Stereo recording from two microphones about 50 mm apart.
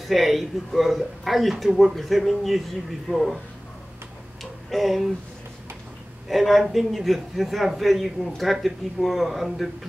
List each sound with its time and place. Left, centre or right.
0.0 s a man's voice: centre
4.4 s a sound: centre
6.2 s a man's voice: centre